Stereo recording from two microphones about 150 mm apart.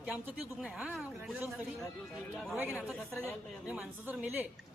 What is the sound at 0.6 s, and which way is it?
A woman's voice, 5° right (ahead or behind).